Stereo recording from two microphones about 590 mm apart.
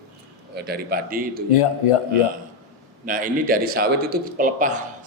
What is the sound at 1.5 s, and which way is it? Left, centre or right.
Speech, left.